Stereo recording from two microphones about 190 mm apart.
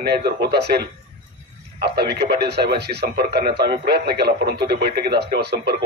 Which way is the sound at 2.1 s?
60° right (ahead or behind).